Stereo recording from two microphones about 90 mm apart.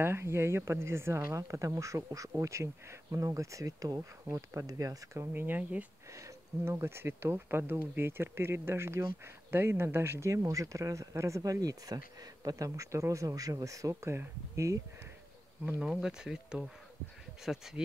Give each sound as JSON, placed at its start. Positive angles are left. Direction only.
{"t": 0.0, "sound": "speech", "side_deg": -30}
{"t": 5.3, "sound": "speech", "side_deg": -20}
{"t": 6.1, "sound": "speech", "side_deg": -35}
{"t": 15.8, "sound": "speech", "side_deg": -10}